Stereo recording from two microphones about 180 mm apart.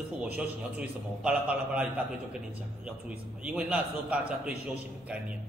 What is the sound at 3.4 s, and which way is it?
A man's voice, 5° right (ahead or behind).